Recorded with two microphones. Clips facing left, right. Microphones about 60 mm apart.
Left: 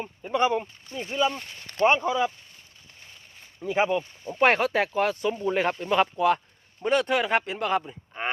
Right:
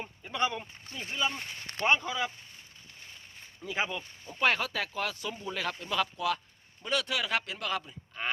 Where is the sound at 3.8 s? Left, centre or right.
Left.